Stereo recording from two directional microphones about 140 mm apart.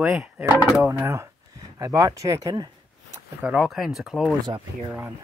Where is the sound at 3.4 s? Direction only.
5° right (ahead or behind).